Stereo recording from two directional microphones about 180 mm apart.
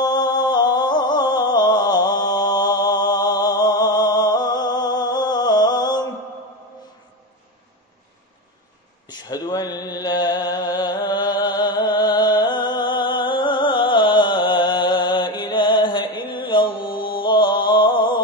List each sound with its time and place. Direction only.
0.0 s music: 25° left (ahead or behind)
9.1 s a sound: 20° left (ahead or behind)
17.2 s music: 25° left (ahead or behind)